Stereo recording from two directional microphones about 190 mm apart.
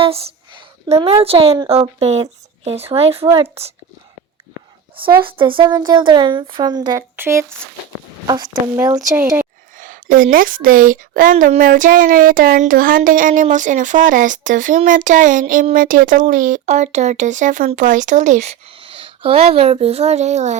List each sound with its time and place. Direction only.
0.0 s a woman's voice: 30° right (ahead or behind)
3.2 s speech: 15° right (ahead or behind)
5.2 s a woman's voice: 25° right (ahead or behind); by 9.5 s 10° right (ahead or behind)
9.7 s a woman's voice: 45° right (ahead or behind)